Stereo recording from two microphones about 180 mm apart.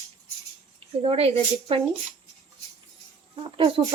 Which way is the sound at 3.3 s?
30° right (ahead or behind).